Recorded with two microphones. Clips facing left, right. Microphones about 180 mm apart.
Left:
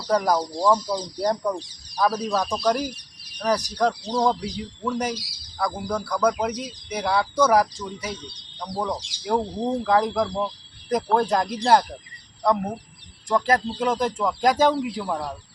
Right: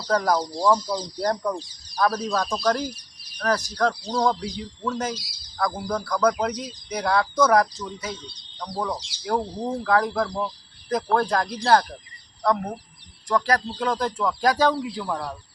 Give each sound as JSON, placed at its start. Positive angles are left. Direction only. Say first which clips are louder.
{"t": 0.1, "sound": "speech", "louder": "left 1 dB", "side_deg": 15}
{"t": 0.3, "sound": "speech", "louder": "even", "side_deg": 0}
{"t": 0.9, "sound": "speech", "louder": "left 1 dB", "side_deg": 10}
{"t": 13.2, "sound": "speech", "louder": "left 1 dB", "side_deg": 25}